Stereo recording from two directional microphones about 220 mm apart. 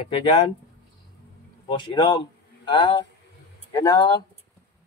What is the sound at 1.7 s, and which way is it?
Speech, 20° left (ahead or behind).